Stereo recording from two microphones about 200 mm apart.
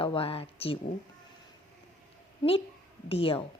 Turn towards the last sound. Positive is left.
turn(degrees=30)  # may be behind; listen again after turning